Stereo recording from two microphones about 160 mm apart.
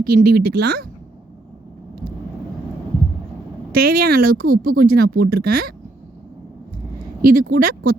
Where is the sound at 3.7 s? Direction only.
70° right (ahead or behind).